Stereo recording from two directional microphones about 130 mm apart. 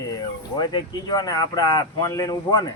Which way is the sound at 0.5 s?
30° left (ahead or behind).